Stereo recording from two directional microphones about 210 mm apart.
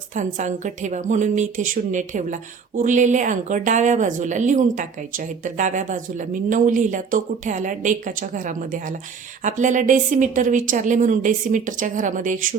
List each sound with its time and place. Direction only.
0.1 s a woman's voice: 35° right (ahead or behind)